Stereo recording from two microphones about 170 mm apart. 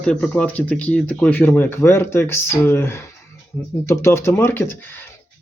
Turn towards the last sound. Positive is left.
turn(degrees=10)  # may be behind; listen again after turning